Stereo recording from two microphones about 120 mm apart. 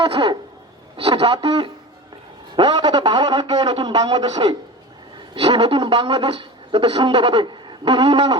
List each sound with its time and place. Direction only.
0.0 s a man's voice: 50° right (ahead or behind)
2.6 s a man's voice: 35° right (ahead or behind)
5.3 s a woman's voice: 55° right (ahead or behind); by 8.4 s 35° right (ahead or behind)